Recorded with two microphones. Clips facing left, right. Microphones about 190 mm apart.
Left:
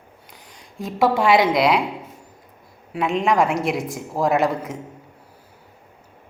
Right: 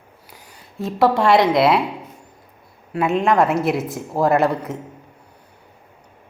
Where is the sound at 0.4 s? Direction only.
5° right (ahead or behind).